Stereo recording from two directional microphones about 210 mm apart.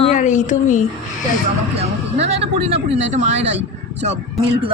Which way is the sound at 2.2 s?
30° right (ahead or behind).